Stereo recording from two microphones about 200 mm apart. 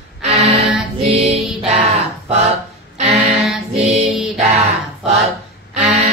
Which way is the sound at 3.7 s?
30° right (ahead or behind).